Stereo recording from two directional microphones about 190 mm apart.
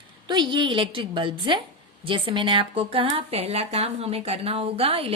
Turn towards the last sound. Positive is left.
turn(degrees=-30)  # may be behind; listen again after turning